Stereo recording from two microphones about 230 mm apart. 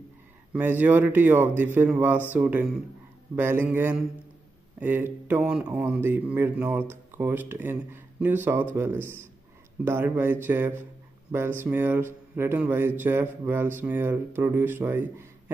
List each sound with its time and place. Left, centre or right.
0.5 s speech: centre